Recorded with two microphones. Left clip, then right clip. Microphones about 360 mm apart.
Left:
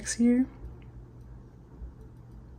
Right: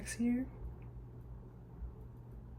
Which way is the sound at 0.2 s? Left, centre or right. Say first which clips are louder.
Left 12 dB; left.